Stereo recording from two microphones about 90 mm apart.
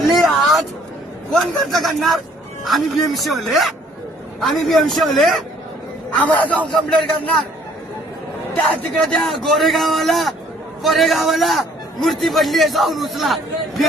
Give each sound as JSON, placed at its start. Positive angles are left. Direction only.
{"t": 0.1, "sound": "a sound", "side_deg": 0}
{"t": 1.3, "sound": "a man's voice", "side_deg": 0}
{"t": 6.1, "sound": "a man's voice", "side_deg": 15}
{"t": 6.7, "sound": "a man's voice", "side_deg": 5}
{"t": 9.0, "sound": "a man's voice", "side_deg": 5}